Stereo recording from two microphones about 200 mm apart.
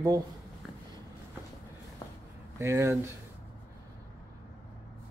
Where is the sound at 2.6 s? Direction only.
15° right (ahead or behind).